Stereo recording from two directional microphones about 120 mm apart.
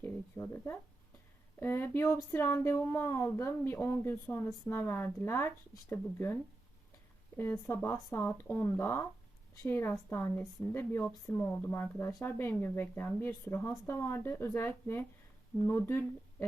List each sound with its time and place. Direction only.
0.0 s a sound: 20° left (ahead or behind)
1.5 s a woman's voice: 15° left (ahead or behind)
7.3 s a woman's voice: 20° left (ahead or behind)